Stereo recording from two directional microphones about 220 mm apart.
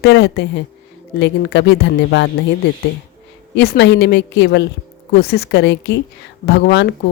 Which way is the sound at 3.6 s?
50° left (ahead or behind).